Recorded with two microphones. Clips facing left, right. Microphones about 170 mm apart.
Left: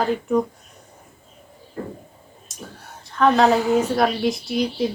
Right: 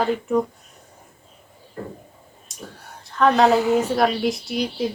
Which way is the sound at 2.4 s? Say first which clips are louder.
Even; centre (ahead or behind).